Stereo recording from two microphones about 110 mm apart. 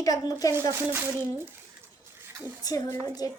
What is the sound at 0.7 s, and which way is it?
Speech, 20° right (ahead or behind).